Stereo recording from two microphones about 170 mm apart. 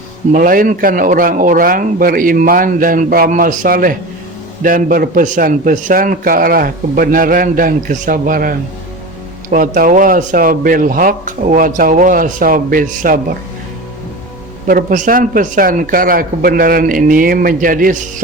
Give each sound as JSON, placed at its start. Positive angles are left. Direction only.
{"t": 0.3, "sound": "a man's voice", "side_deg": -55}
{"t": 14.7, "sound": "speech", "side_deg": -55}